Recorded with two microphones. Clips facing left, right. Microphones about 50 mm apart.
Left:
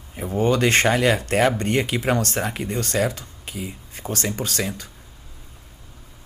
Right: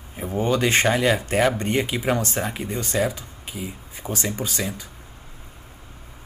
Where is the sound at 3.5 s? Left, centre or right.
Left.